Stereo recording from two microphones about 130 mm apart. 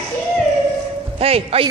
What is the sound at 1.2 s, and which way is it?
Speech, 50° right (ahead or behind).